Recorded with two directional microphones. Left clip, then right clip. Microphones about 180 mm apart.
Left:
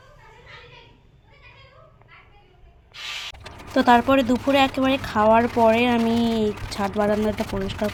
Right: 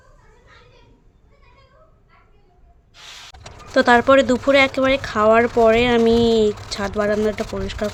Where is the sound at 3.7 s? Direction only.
25° right (ahead or behind).